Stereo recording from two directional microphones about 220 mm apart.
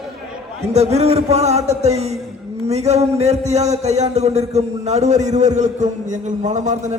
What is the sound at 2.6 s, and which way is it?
A man's voice, 30° right (ahead or behind).